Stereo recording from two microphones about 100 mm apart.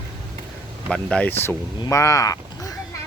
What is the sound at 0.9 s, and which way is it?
Speech, 5° left (ahead or behind).